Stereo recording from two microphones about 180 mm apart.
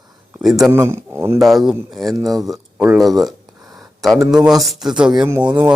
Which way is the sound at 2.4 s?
Centre (ahead or behind).